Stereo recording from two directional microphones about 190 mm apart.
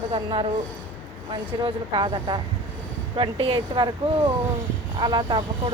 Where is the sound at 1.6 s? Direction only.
25° right (ahead or behind).